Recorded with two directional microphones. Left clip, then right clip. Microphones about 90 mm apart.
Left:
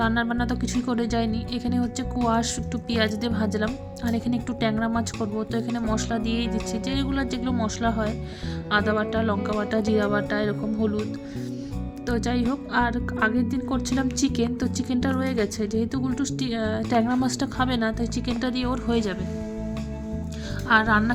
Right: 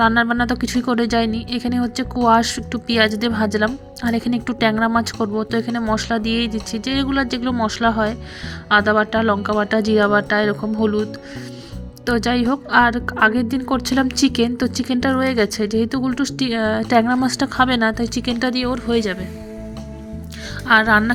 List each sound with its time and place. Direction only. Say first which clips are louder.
0.0 s a woman's voice: right 9 dB; 45° right (ahead or behind)
5.4 s a woman's voice: right 7 dB; 40° right (ahead or behind); by 11.0 s 65° right (ahead or behind)
12.0 s a woman's voice: right 8 dB; 55° right (ahead or behind); by 17.5 s 35° right (ahead or behind)
17.6 s a woman's voice: right 9 dB; 50° right (ahead or behind)
18.7 s speech: right 6 dB; 40° right (ahead or behind)
20.7 s a woman's voice: right 6 dB; 55° right (ahead or behind)